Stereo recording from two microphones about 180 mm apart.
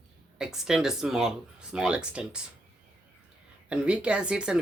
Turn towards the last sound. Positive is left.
turn(degrees=-5)  # may be behind; listen again after turning